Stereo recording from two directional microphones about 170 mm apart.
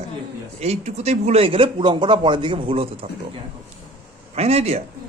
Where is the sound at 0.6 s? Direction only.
40° right (ahead or behind).